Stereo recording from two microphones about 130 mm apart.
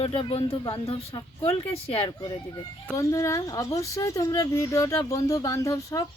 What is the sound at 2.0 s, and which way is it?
Speech, 35° left (ahead or behind).